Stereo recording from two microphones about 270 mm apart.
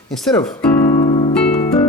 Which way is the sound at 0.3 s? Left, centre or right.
Centre.